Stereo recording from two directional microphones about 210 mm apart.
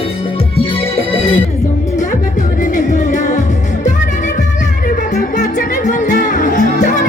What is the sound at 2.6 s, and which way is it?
Music, 35° left (ahead or behind).